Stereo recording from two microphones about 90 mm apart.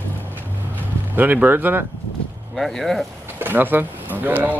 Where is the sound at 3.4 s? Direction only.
20° right (ahead or behind).